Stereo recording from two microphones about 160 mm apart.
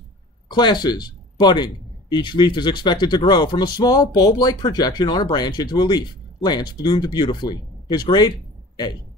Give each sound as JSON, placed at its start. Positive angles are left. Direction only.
{"t": 0.5, "sound": "a man's voice", "side_deg": 25}